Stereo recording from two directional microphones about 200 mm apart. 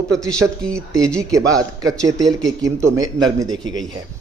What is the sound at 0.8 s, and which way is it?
A man's voice, 15° right (ahead or behind).